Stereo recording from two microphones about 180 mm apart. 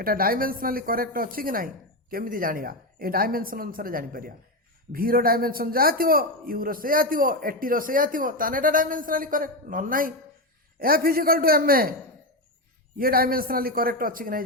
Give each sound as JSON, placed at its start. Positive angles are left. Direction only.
{"t": 0.0, "sound": "a man's voice", "side_deg": -55}
{"t": 13.0, "sound": "a man's voice", "side_deg": -55}